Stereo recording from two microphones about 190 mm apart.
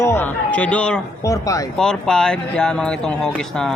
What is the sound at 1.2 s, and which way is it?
Speech, 15° left (ahead or behind).